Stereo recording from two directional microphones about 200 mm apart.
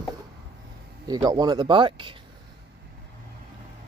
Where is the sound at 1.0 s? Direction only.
20° right (ahead or behind).